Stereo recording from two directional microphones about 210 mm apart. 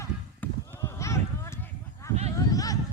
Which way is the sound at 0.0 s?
10° left (ahead or behind).